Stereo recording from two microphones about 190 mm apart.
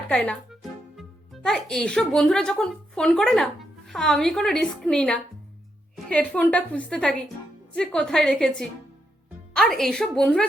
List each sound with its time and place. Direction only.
0.1 s a child's voice: 5° left (ahead or behind)